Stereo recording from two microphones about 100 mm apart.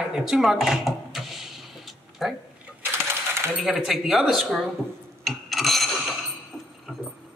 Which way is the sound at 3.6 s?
5° right (ahead or behind).